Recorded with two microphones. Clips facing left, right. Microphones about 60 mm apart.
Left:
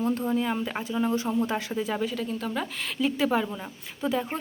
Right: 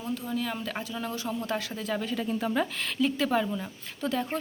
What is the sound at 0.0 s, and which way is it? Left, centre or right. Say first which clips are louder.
Speech: left 7 dB; left.